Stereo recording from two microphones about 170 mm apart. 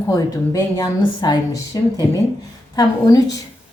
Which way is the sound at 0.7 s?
25° left (ahead or behind).